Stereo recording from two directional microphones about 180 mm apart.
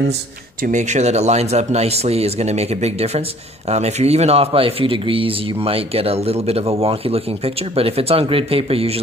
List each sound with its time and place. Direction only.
0.7 s speech: 40° right (ahead or behind)